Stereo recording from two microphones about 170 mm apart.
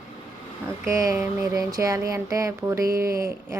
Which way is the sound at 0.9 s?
20° right (ahead or behind).